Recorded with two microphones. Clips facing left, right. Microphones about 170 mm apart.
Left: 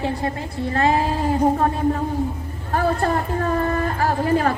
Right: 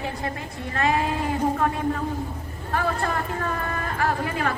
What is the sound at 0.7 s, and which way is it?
A woman's voice, 30° left (ahead or behind).